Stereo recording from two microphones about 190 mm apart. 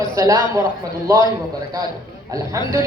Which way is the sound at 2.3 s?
15° right (ahead or behind).